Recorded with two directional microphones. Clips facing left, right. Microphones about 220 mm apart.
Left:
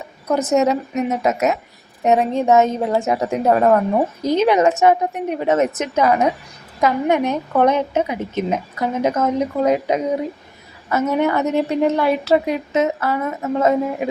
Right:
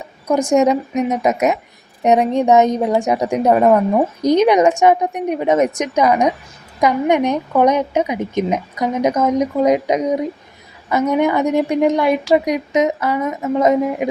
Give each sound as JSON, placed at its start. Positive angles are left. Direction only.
{"t": 0.3, "sound": "a woman's voice", "side_deg": -15}
{"t": 11.1, "sound": "a woman's voice", "side_deg": -15}